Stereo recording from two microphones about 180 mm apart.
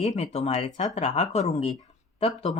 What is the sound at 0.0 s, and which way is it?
Speech, 35° left (ahead or behind).